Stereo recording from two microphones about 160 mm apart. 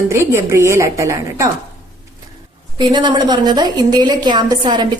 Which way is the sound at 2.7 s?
25° right (ahead or behind).